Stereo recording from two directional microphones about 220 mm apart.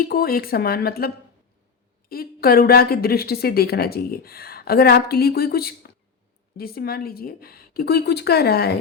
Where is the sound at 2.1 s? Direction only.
45° left (ahead or behind).